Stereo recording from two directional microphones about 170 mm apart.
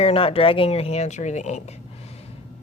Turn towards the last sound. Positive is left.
turn(degrees=40)  # may be behind; listen again after turning